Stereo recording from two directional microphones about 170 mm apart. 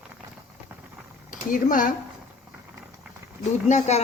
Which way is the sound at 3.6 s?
45° left (ahead or behind).